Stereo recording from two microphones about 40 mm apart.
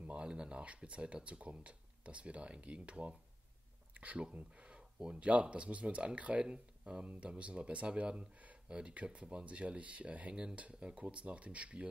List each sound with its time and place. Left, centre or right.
0.1 s speech: right